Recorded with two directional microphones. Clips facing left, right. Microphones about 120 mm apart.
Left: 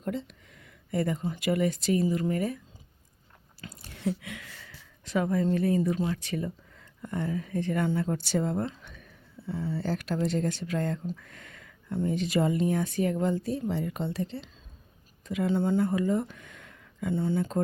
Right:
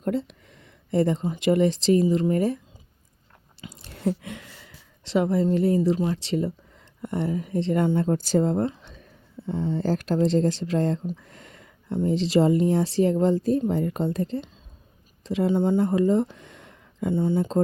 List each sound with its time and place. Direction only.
0.0 s a sound: 40° right (ahead or behind)
0.9 s speech: 30° right (ahead or behind)
3.9 s a woman's voice: 40° right (ahead or behind); by 8.0 s 25° right (ahead or behind)
8.0 s speech: 40° right (ahead or behind)
9.5 s speech: 25° right (ahead or behind)
9.8 s speech: 40° right (ahead or behind)
11.2 s a sound: 30° right (ahead or behind)
12.1 s speech: 30° right (ahead or behind)
15.2 s a sound: 30° right (ahead or behind)
15.4 s speech: 15° right (ahead or behind)